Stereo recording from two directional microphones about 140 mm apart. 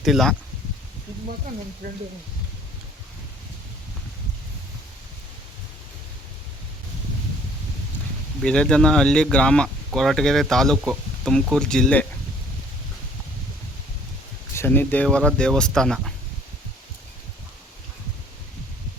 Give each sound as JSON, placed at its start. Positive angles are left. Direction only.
{"t": 0.0, "sound": "speech", "side_deg": 0}
{"t": 1.8, "sound": "speech", "side_deg": -90}
{"t": 8.4, "sound": "speech", "side_deg": 5}
{"t": 14.5, "sound": "speech", "side_deg": 15}